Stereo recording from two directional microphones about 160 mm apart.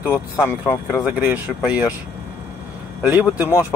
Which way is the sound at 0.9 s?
5° right (ahead or behind).